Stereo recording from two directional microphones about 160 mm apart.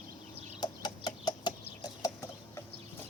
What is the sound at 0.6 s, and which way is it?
Chicken, 25° left (ahead or behind).